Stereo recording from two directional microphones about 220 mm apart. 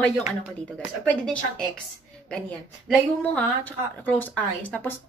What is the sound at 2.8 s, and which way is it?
A woman's voice, 5° left (ahead or behind).